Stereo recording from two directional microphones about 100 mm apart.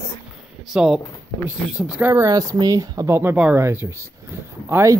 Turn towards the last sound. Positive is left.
turn(degrees=-25)  # may be behind; listen again after turning